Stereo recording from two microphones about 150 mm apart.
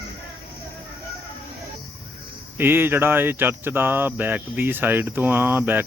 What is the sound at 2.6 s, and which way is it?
Speech, 15° right (ahead or behind).